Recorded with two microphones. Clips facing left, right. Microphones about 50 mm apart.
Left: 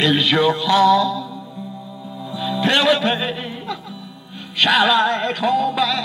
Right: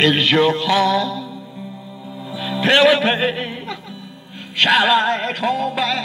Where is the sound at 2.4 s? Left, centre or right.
Right.